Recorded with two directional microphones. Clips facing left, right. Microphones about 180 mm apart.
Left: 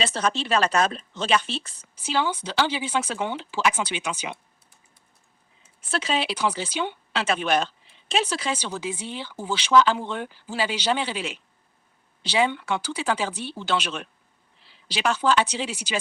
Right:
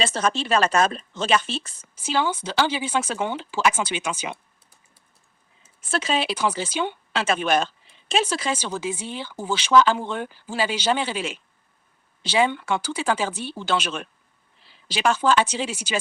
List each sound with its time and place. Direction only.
0.0 s speech: 45° right (ahead or behind)
5.8 s speech: 45° right (ahead or behind)